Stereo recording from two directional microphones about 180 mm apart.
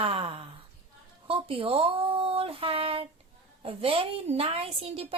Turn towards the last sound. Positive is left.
turn(degrees=-35)  # may be behind; listen again after turning